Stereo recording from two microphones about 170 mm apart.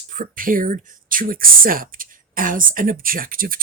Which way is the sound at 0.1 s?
50° right (ahead or behind).